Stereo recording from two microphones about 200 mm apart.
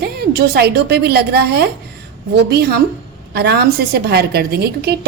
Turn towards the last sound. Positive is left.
turn(degrees=-55)  # may be behind; listen again after turning